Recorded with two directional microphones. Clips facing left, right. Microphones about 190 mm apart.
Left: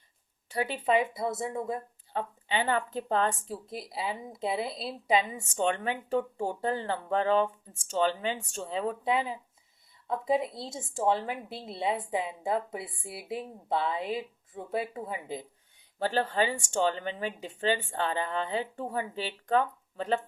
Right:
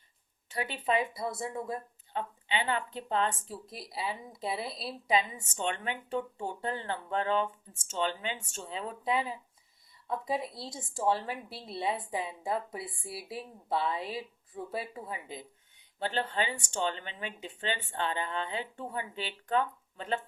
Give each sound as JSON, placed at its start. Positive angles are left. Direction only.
{"t": 0.5, "sound": "a woman's voice", "side_deg": 30}
{"t": 2.1, "sound": "speech", "side_deg": 40}
{"t": 3.7, "sound": "a woman's voice", "side_deg": 25}
{"t": 16.4, "sound": "speech", "side_deg": 40}